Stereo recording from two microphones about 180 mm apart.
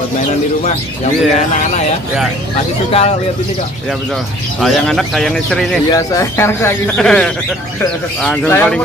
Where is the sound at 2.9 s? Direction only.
35° left (ahead or behind).